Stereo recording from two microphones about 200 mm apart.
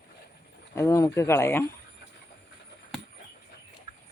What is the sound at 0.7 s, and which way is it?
Speech, 15° left (ahead or behind).